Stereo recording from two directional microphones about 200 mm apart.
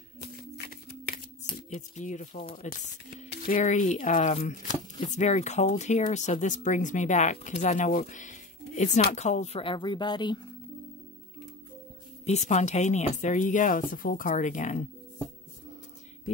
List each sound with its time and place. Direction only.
0.2 s a sound: 50° left (ahead or behind)
1.7 s speech: 35° left (ahead or behind)
12.3 s speech: 35° left (ahead or behind)